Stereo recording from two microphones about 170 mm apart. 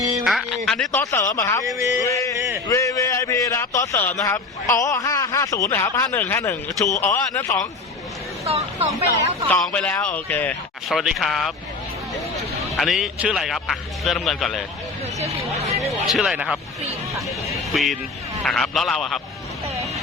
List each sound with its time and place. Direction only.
0.3 s speech: centre (ahead or behind)
1.1 s speech: 20° left (ahead or behind)
1.6 s a sound: 20° right (ahead or behind)
2.0 s a man's voice: 20° left (ahead or behind)
8.4 s speech: 35° right (ahead or behind)
9.7 s speech: 10° left (ahead or behind)
12.7 s speech: centre (ahead or behind)
15.2 s speech: 40° right (ahead or behind)
15.9 s speech: centre (ahead or behind)